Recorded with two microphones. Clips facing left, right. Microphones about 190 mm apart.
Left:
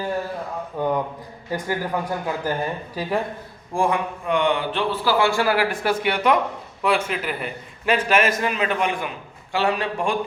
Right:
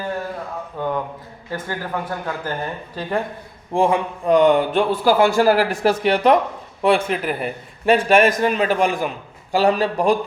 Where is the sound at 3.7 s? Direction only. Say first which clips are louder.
Right 4 dB; 25° right (ahead or behind).